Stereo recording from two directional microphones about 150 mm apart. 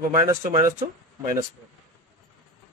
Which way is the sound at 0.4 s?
60° right (ahead or behind).